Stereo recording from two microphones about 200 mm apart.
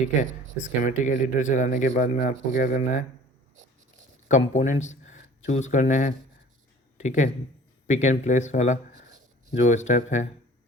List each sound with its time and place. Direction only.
0.6 s speech: 40° left (ahead or behind)
4.5 s speech: 40° left (ahead or behind)